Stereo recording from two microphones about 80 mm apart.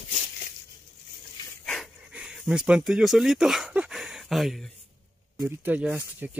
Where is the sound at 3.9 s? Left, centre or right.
Centre.